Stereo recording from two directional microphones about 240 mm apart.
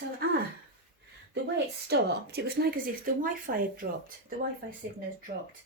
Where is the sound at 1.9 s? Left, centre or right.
Right.